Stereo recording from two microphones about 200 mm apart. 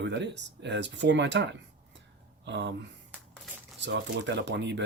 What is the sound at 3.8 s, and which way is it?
Speech, 60° right (ahead or behind).